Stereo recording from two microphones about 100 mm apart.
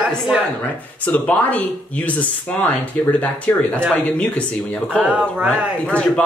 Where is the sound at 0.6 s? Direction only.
15° left (ahead or behind).